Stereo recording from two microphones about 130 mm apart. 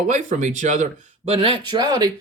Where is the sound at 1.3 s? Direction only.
45° right (ahead or behind).